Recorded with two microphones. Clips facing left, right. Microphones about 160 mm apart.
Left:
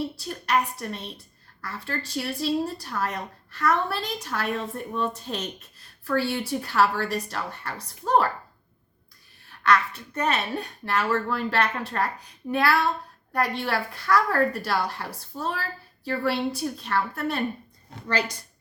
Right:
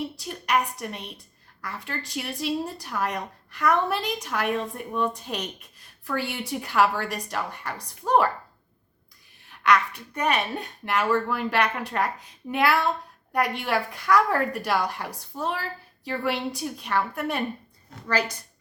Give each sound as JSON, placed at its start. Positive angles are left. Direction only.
{"t": 0.2, "sound": "speech", "side_deg": -15}
{"t": 9.6, "sound": "speech", "side_deg": -15}